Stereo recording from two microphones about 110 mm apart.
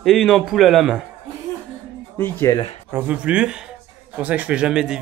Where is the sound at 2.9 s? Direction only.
15° right (ahead or behind).